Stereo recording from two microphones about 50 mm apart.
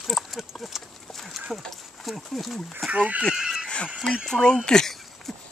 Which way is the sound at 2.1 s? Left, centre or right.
Centre.